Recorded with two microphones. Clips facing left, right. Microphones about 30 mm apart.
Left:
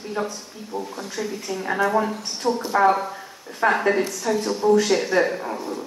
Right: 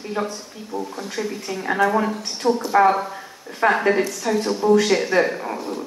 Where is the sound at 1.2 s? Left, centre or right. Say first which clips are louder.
Right 1 dB; right.